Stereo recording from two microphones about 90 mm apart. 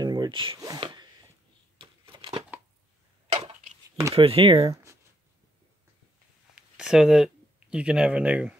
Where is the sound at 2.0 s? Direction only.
85° right.